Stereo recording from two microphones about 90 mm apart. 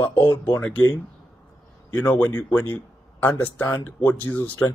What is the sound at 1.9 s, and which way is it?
Speech, 15° left (ahead or behind).